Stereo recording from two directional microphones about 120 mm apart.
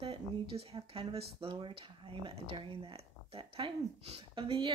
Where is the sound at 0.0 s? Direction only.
55° right (ahead or behind).